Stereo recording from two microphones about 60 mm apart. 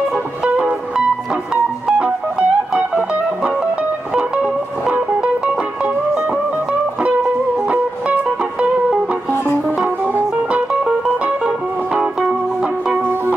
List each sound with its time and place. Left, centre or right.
0.1 s music: centre
7.6 s music: right
10.5 s music: centre